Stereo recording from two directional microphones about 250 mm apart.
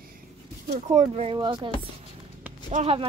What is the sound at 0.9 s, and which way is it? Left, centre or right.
Speech, right.